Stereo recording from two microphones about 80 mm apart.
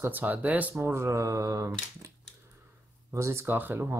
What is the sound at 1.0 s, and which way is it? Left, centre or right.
Speech, right.